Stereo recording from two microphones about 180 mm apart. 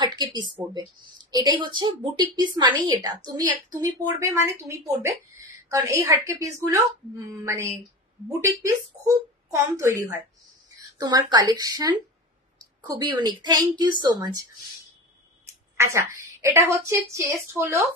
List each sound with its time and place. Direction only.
0.0 s a woman's voice: 25° right (ahead or behind)
15.4 s a sound: 15° right (ahead or behind)
17.5 s a woman's voice: 15° right (ahead or behind)